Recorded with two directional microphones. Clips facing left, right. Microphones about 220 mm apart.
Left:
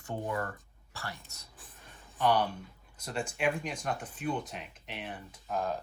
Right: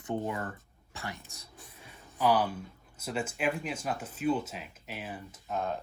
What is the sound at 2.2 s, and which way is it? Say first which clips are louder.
Speech: right 1 dB; centre (ahead or behind).